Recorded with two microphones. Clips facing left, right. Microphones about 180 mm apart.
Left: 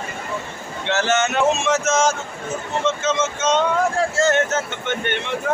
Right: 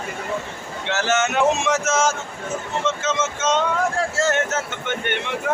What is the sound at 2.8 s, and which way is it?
Vehicle, 5° right (ahead or behind).